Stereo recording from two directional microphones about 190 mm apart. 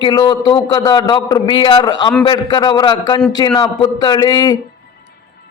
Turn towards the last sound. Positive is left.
turn(degrees=20)  # may be behind; listen again after turning